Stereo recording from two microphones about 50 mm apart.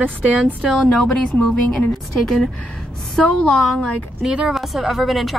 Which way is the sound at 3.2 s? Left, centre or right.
Centre.